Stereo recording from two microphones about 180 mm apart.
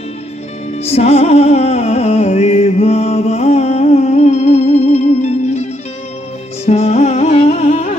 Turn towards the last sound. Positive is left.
turn(degrees=35)  # may be behind; listen again after turning